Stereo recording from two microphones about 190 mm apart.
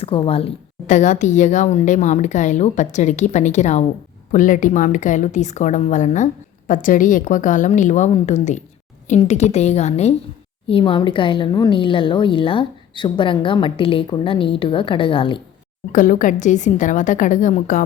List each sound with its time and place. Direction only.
0.0 s a woman's voice: 30° left (ahead or behind)
15.9 s a woman's voice: 45° left (ahead or behind)